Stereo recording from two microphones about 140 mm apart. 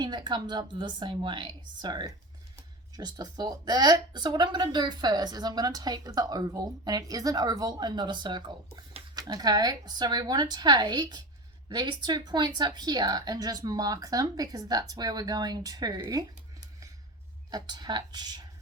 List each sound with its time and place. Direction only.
0.0 s a woman's voice: 30° right (ahead or behind)